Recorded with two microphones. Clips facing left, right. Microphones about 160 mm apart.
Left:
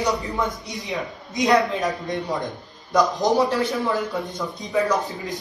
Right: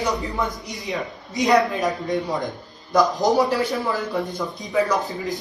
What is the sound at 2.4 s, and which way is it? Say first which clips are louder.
A man's voice: right 2 dB; centre (ahead or behind).